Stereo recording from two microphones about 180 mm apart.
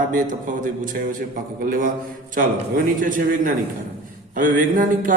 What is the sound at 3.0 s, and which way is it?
A man's voice, 50° right (ahead or behind).